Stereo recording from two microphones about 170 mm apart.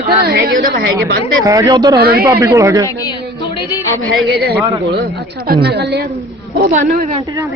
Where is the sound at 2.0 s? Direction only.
65° right (ahead or behind).